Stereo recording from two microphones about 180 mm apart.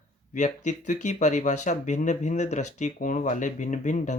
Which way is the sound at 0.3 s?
45° left (ahead or behind).